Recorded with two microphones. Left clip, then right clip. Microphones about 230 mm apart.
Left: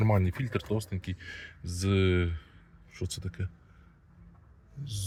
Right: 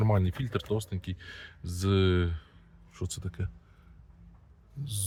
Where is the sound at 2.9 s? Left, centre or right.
Right.